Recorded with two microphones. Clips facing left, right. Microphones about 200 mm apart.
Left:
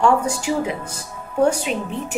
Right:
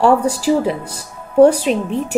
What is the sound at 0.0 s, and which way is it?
A woman's voice, 35° right (ahead or behind).